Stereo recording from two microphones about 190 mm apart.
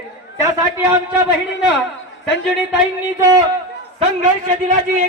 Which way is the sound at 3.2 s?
20° right (ahead or behind).